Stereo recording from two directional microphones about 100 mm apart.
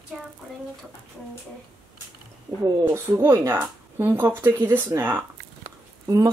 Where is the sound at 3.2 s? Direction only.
25° right (ahead or behind).